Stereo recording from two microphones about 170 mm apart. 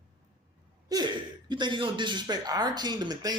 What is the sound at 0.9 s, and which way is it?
Speech, 25° right (ahead or behind).